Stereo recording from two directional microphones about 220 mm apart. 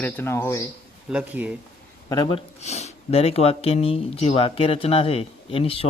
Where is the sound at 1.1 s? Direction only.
5° right (ahead or behind).